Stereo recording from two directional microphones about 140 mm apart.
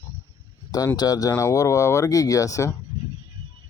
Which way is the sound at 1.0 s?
25° left (ahead or behind).